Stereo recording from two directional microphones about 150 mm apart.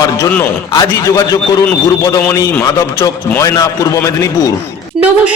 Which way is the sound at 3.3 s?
20° left (ahead or behind).